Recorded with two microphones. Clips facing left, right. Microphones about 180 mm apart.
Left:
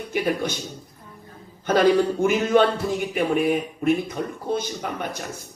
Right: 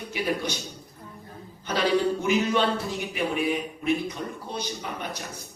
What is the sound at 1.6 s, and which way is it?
A man's voice, 50° left (ahead or behind).